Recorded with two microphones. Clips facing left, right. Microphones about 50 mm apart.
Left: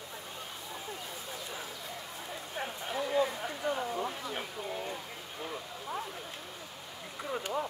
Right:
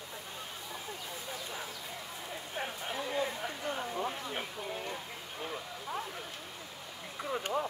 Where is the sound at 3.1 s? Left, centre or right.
Centre.